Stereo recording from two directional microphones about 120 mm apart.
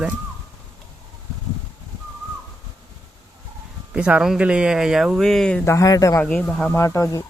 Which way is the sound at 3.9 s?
10° right (ahead or behind).